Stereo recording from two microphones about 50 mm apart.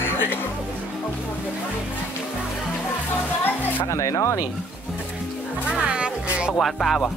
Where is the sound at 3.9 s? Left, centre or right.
Left.